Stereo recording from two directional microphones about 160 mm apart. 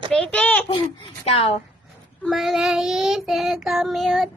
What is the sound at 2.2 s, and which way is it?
Child singing, centre (ahead or behind).